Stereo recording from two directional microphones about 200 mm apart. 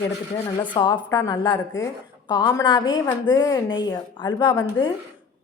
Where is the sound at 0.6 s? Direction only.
20° left (ahead or behind).